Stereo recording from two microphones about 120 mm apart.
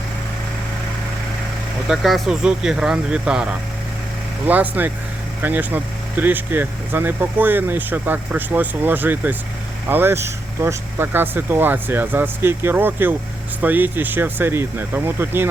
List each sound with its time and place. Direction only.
1.9 s speech: centre (ahead or behind); by 15.4 s 20° right (ahead or behind)